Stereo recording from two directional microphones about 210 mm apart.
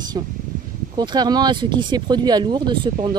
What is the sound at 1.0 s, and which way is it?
Speech, 20° right (ahead or behind).